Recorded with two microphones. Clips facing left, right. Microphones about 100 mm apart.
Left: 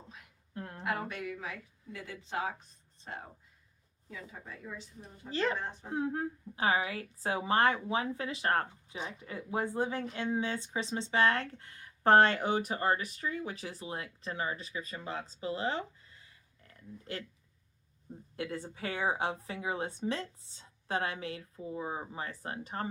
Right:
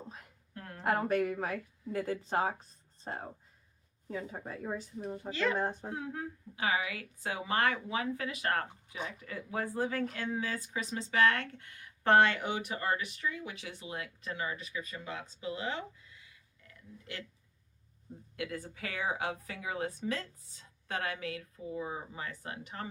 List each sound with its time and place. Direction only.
0.5 s a sound: 25° left (ahead or behind)
0.9 s speech: 40° right (ahead or behind)
5.3 s speech: 35° left (ahead or behind)
5.5 s speech: 45° right (ahead or behind)
5.9 s a woman's voice: 35° left (ahead or behind)
18.3 s a woman's voice: 30° left (ahead or behind)